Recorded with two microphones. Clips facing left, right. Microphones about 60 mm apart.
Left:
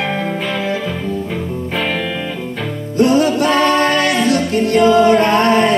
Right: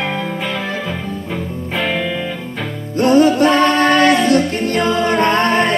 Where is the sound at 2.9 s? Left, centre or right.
Right.